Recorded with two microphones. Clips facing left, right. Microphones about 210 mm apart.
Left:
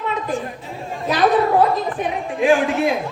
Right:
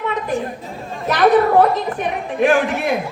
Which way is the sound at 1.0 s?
65° right (ahead or behind).